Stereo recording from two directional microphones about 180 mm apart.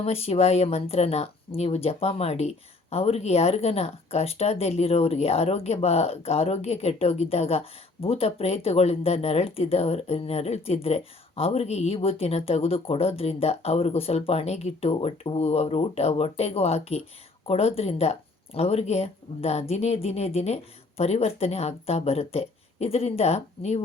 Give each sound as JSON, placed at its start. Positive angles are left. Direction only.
{"t": 0.0, "sound": "speech", "side_deg": 35}